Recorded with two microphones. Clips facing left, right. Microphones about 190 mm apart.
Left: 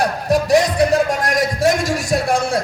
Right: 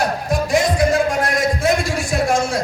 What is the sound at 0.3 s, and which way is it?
Music, 40° left (ahead or behind).